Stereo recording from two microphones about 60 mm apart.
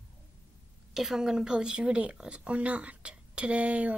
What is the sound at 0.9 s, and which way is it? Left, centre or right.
Speech, centre.